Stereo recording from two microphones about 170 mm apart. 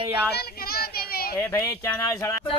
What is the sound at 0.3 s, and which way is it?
Child singing, 65° left (ahead or behind).